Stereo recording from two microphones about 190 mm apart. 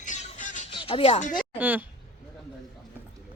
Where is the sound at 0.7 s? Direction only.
25° left (ahead or behind).